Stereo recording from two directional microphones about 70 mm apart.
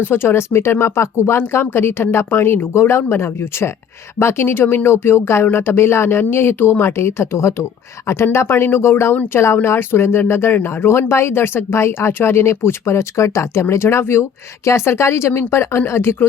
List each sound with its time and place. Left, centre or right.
0.0 s speech: left